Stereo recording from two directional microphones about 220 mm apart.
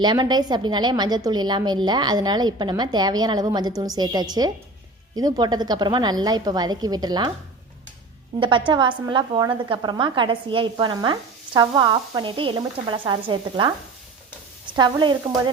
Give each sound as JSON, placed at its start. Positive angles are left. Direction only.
{"t": 0.0, "sound": "a woman's voice", "side_deg": -20}
{"t": 8.4, "sound": "a woman's voice", "side_deg": -20}
{"t": 14.8, "sound": "a woman's voice", "side_deg": -20}